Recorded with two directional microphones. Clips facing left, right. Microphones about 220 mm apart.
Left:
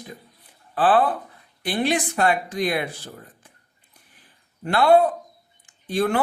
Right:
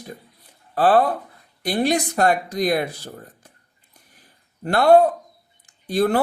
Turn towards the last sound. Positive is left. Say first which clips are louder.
# right 3 dB
turn(degrees=-40)  # may be behind; listen again after turning